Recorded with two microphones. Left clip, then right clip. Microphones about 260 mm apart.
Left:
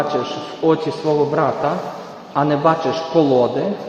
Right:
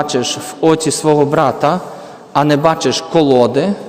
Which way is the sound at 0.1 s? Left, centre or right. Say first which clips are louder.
Right 4 dB; right.